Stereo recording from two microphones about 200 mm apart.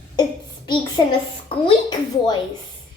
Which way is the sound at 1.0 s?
20° left (ahead or behind).